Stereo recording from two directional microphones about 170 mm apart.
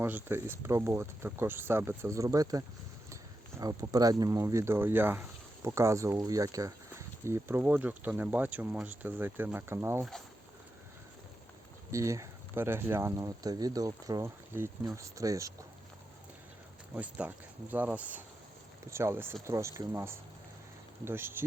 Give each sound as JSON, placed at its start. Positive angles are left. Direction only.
{"t": 0.0, "sound": "speech", "side_deg": -15}
{"t": 10.0, "sound": "speech", "side_deg": 0}
{"t": 11.9, "sound": "speech", "side_deg": -20}
{"t": 16.9, "sound": "speech", "side_deg": -10}